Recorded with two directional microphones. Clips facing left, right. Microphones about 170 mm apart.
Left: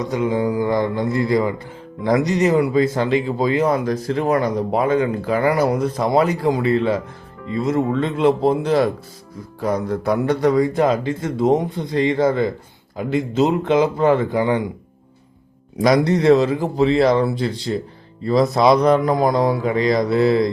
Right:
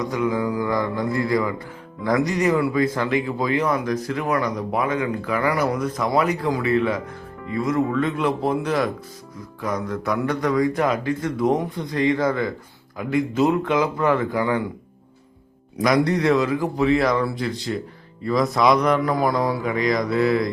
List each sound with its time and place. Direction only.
0.0 s speech: 25° left (ahead or behind)
15.8 s speech: 30° left (ahead or behind)